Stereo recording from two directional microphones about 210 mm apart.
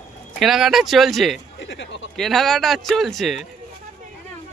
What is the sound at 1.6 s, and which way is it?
Speech, 60° left (ahead or behind).